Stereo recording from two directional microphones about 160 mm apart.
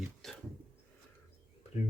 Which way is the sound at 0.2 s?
Centre (ahead or behind).